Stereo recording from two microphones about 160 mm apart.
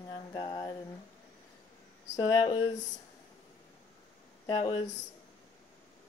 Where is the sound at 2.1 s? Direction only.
30° left (ahead or behind).